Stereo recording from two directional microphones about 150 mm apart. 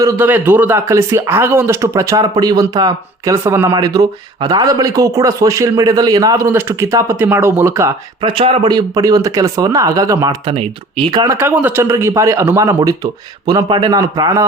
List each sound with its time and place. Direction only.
0.0 s speech: 15° right (ahead or behind)
8.2 s speech: 35° right (ahead or behind)
8.7 s speech: 25° right (ahead or behind)
11.3 s speech: 15° right (ahead or behind)